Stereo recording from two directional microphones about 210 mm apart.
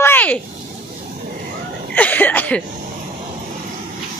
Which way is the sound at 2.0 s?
10° left (ahead or behind).